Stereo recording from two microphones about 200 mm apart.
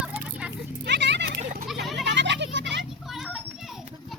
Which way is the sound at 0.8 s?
60° right (ahead or behind).